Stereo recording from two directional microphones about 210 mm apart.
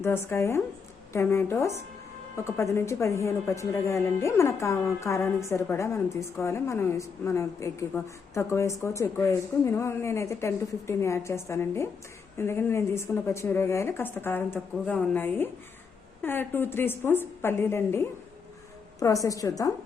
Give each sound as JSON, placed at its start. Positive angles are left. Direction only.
{"t": 0.0, "sound": "speech", "side_deg": 10}